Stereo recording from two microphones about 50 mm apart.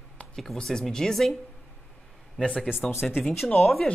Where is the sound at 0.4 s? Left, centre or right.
Centre.